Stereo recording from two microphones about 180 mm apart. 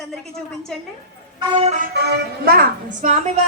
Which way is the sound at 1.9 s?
65° right (ahead or behind).